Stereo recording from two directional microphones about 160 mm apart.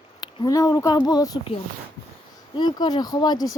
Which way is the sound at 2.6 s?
25° left (ahead or behind).